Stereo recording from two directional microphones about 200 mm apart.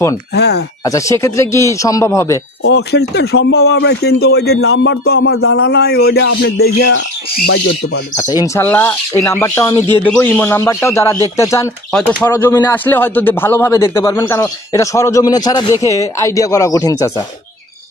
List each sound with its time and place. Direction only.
0.3 s a man's voice: 55° left (ahead or behind)
0.8 s a man's voice: 15° left (ahead or behind)
2.6 s a man's voice: 55° left (ahead or behind); by 5.3 s 75° left (ahead or behind)
5.7 s a man's voice: 55° left (ahead or behind)
8.3 s a man's voice: 20° left (ahead or behind)